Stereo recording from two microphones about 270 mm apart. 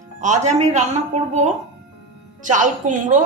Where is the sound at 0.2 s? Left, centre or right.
Right.